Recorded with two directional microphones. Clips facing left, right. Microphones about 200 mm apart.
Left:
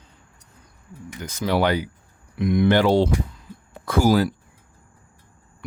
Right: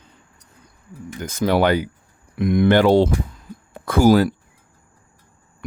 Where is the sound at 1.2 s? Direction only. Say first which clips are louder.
Right 4 dB; 50° right (ahead or behind).